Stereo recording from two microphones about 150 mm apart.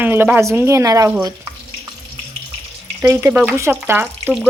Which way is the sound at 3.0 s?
15° right (ahead or behind).